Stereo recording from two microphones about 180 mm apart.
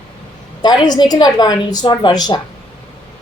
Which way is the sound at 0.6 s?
25° left (ahead or behind).